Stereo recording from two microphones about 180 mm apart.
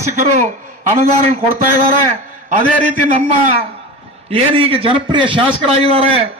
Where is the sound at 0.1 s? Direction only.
45° right (ahead or behind).